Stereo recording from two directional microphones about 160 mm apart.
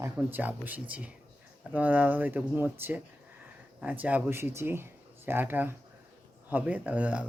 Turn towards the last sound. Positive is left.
turn(degrees=-10)  # may be behind; listen again after turning